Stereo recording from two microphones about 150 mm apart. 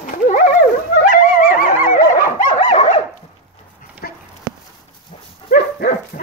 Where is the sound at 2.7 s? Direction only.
45° left (ahead or behind).